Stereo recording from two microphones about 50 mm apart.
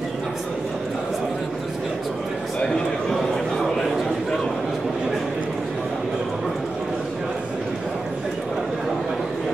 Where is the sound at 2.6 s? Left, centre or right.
Centre.